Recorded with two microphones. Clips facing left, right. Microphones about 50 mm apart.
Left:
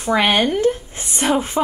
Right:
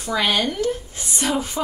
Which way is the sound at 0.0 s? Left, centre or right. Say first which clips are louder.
Left 5 dB; left.